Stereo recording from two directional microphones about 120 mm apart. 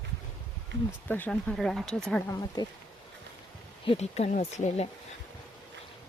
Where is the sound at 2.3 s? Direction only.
30° left (ahead or behind).